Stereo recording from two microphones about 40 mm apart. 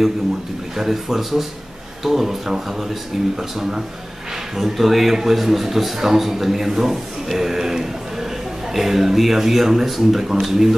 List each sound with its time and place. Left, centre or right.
0.7 s a man's voice: centre